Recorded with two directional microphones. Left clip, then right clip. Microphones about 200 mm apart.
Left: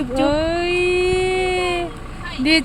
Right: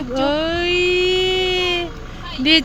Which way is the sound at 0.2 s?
5° right (ahead or behind).